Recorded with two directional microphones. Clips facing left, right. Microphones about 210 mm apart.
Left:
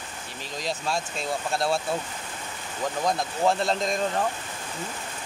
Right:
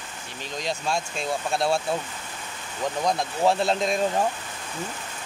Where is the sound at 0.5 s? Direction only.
Centre (ahead or behind).